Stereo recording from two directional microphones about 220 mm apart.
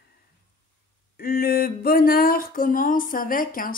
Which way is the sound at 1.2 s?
45° left (ahead or behind).